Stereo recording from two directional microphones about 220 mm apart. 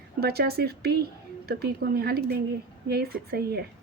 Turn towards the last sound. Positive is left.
turn(degrees=-45)  # may be behind; listen again after turning